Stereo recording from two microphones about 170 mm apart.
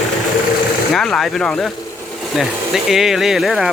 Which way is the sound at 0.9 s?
Centre (ahead or behind).